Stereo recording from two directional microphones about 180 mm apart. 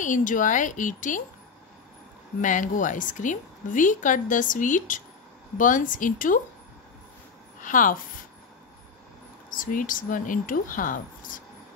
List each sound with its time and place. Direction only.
0.0 s a woman's voice: 45° left (ahead or behind)
2.4 s a woman's voice: 45° left (ahead or behind)
7.6 s a woman's voice: 45° left (ahead or behind)
9.5 s a woman's voice: 50° left (ahead or behind)